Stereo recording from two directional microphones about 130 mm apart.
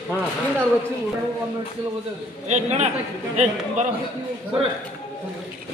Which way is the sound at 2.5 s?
60° right (ahead or behind).